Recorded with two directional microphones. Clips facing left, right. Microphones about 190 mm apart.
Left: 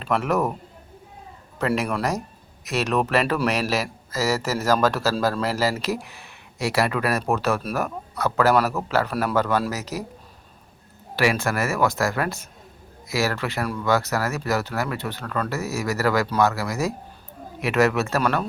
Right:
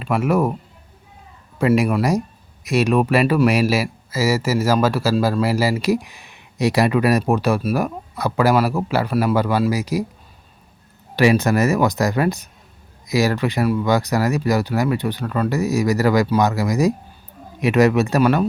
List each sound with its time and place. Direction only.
0.0 s speech: 10° right (ahead or behind)
1.5 s speech: 10° right (ahead or behind)
11.2 s speech: 20° right (ahead or behind)